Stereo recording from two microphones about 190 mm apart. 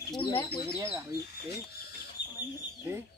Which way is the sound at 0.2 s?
25° left (ahead or behind).